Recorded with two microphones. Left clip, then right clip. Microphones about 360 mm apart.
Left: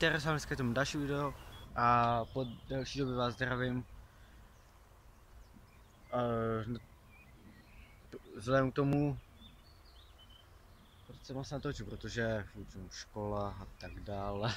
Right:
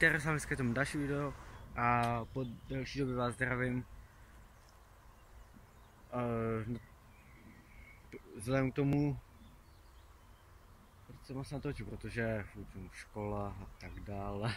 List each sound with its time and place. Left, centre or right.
0.0 s speech: centre
6.1 s speech: centre
8.1 s speech: centre
11.2 s speech: centre